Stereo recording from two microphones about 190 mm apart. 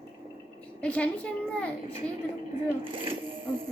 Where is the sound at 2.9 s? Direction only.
30° right (ahead or behind).